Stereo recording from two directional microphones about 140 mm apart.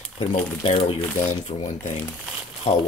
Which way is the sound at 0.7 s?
40° left (ahead or behind).